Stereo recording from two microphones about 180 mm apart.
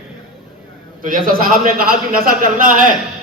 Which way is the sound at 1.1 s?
50° right (ahead or behind).